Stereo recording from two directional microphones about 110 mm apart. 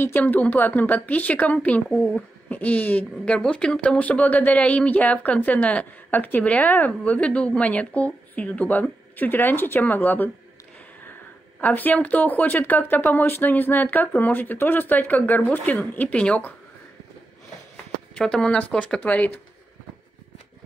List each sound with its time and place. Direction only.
0.0 s speech: 20° left (ahead or behind)
11.6 s speech: 15° left (ahead or behind)
18.1 s speech: 5° left (ahead or behind)